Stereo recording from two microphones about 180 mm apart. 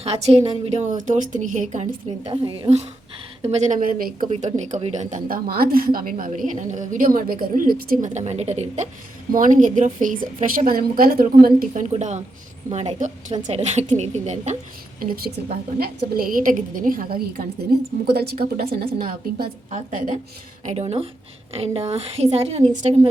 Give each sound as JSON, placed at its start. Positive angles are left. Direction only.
{"t": 0.0, "sound": "a woman's voice", "side_deg": -35}
{"t": 15.8, "sound": "speech", "side_deg": -60}
{"t": 18.1, "sound": "a woman's voice", "side_deg": -60}
{"t": 20.7, "sound": "a woman's voice", "side_deg": -35}